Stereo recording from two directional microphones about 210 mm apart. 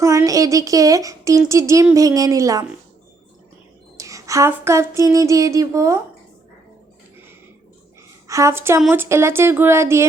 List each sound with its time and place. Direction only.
0.0 s speech: 15° right (ahead or behind)
3.9 s a sound: 15° right (ahead or behind)
8.3 s speech: 15° right (ahead or behind)